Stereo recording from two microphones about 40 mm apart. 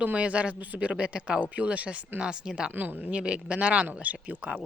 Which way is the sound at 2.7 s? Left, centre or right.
Right.